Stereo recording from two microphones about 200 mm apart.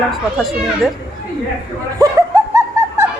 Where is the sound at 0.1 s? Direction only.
Centre (ahead or behind).